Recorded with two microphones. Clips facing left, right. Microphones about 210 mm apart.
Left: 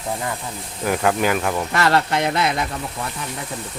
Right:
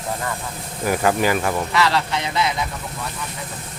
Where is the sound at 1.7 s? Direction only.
50° left (ahead or behind).